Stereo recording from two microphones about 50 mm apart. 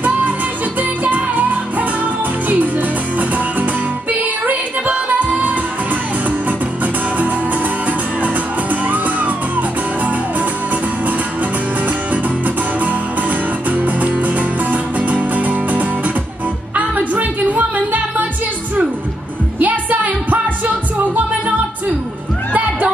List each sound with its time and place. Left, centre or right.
0.7 s music: right
6.8 s music: right
8.8 s music: right
12.1 s music: right
19.6 s music: right